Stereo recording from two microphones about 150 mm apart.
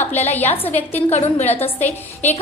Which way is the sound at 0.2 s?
45° left (ahead or behind).